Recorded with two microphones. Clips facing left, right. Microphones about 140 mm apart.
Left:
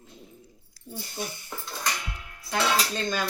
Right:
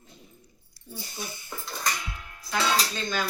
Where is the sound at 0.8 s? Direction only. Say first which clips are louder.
Left 5 dB; 90° left.